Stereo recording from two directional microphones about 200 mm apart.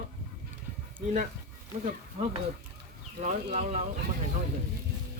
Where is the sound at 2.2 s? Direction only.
40° right (ahead or behind).